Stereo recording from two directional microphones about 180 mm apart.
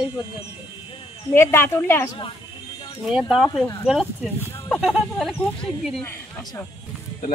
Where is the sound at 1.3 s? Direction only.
15° left (ahead or behind).